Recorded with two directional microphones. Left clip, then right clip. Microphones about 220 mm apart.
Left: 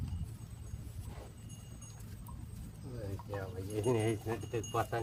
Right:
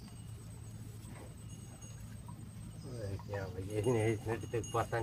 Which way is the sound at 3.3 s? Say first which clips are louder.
Even; 50° left (ahead or behind).